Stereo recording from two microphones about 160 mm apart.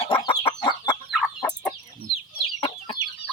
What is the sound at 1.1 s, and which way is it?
Fowl, 5° left (ahead or behind).